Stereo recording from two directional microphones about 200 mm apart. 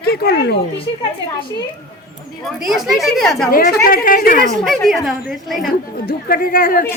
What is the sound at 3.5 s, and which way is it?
Speech, 45° left (ahead or behind).